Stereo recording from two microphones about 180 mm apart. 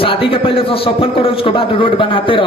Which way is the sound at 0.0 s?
30° left (ahead or behind).